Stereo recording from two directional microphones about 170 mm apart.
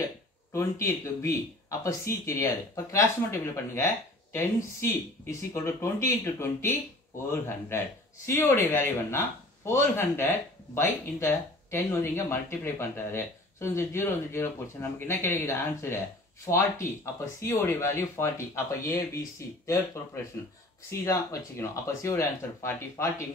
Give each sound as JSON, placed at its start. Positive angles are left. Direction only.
{"t": 0.5, "sound": "speech", "side_deg": 15}